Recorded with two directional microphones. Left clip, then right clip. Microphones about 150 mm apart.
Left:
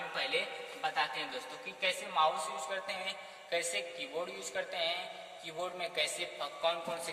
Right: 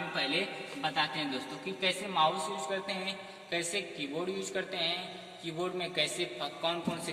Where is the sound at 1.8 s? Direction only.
10° left (ahead or behind).